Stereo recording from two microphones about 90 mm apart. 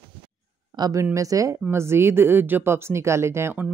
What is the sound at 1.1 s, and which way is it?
Speech, 40° right (ahead or behind).